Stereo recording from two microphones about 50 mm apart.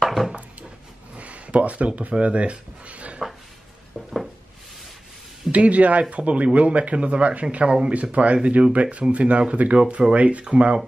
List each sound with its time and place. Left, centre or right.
0.0 s a sound: centre
1.1 s speech: right
5.5 s speech: right